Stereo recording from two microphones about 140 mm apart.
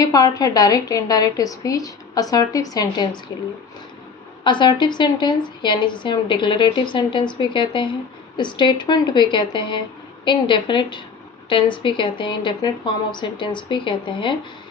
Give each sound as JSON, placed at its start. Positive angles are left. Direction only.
{"t": 0.0, "sound": "a woman's voice", "side_deg": 25}
{"t": 4.4, "sound": "a woman's voice", "side_deg": 35}